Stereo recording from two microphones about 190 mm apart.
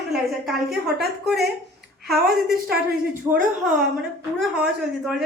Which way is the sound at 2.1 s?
55° right (ahead or behind).